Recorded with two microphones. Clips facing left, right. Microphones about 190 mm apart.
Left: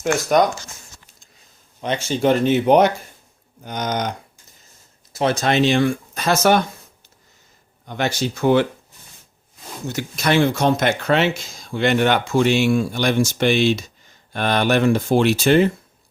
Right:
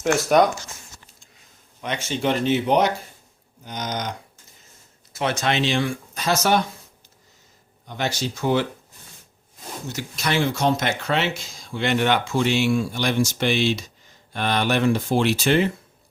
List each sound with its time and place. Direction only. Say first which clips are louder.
0.0 s speech: even; centre (ahead or behind)
1.8 s speech: left 5 dB; 35° left (ahead or behind)
2.4 s speech: left 4 dB; 50° left (ahead or behind)
5.1 s speech: left 5 dB; 35° left (ahead or behind); by 6.6 s 55° left (ahead or behind)
7.9 s speech: left 4 dB; 60° left (ahead or behind)
9.9 s speech: left 6 dB; 55° left (ahead or behind)